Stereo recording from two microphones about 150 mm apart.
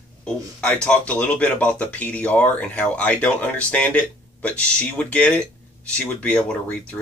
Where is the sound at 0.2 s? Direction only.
10° left (ahead or behind).